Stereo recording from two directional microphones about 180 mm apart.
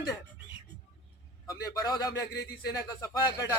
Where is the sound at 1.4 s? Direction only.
20° left (ahead or behind).